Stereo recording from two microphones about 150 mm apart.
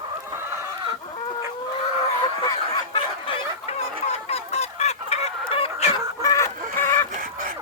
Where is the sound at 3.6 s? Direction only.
45° left (ahead or behind).